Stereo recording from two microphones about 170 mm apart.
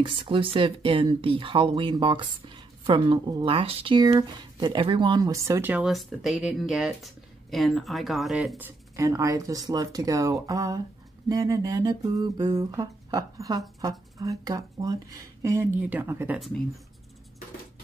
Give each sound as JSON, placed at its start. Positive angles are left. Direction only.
{"t": 0.0, "sound": "speech", "side_deg": -30}